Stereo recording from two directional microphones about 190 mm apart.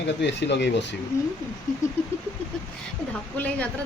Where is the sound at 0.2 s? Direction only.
65° left (ahead or behind).